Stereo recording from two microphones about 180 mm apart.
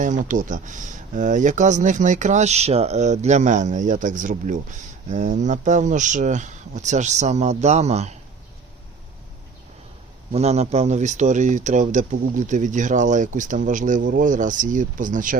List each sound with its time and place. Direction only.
0.0 s speech: 45° right (ahead or behind)
10.3 s speech: 35° right (ahead or behind)